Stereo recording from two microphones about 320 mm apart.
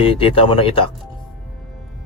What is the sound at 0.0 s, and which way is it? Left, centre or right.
Speech, centre.